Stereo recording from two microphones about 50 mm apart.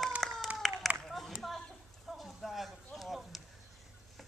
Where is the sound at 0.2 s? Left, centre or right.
Centre.